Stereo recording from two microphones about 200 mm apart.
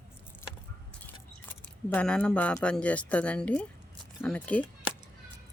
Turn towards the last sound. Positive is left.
turn(degrees=5)  # may be behind; listen again after turning